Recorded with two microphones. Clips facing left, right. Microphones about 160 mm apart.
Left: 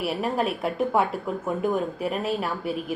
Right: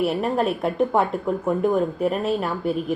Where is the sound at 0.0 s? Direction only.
Centre (ahead or behind).